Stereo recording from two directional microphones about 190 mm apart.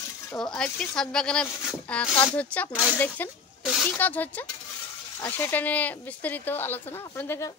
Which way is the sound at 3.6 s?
Centre (ahead or behind).